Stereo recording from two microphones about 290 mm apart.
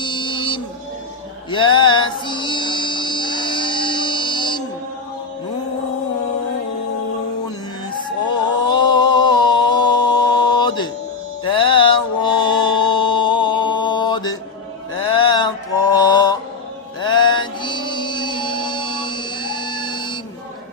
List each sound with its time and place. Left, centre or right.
0.0 s music: centre
8.7 s a sound: centre
11.4 s mantra: centre